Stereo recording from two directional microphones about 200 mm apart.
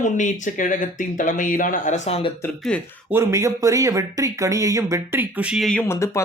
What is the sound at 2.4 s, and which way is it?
Speech, 5° left (ahead or behind).